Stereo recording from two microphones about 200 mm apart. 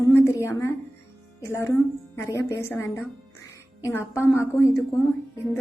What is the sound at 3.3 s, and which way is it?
Music, 15° left (ahead or behind).